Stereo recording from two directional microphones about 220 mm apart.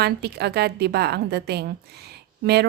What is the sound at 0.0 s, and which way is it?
Speech, 45° right (ahead or behind).